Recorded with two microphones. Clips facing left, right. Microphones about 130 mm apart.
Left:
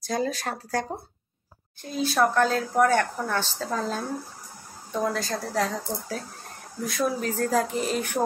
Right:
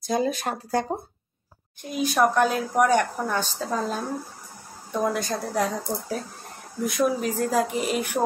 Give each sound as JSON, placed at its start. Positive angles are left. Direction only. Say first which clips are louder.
{"t": 0.0, "sound": "speech", "louder": "right 3 dB", "side_deg": -20}